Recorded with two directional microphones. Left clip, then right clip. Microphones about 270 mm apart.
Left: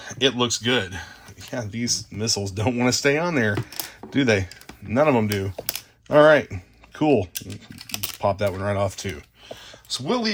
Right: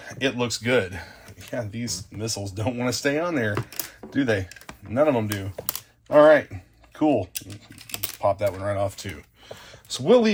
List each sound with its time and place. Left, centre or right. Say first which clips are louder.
0.0 s speech: left 4 dB; left
9.9 s speech: right 6 dB; centre